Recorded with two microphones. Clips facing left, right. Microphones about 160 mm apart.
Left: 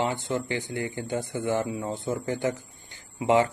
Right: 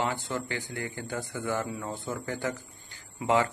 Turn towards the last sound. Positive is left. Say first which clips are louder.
# left 4 dB
turn(degrees=20)  # may be behind; listen again after turning